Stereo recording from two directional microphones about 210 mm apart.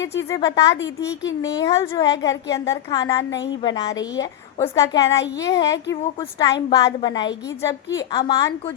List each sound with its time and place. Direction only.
0.0 s a woman's voice: 60° left (ahead or behind)
0.3 s a woman's voice: 15° left (ahead or behind)
3.2 s a woman's voice: 55° left (ahead or behind)
3.5 s a woman's voice: 20° left (ahead or behind)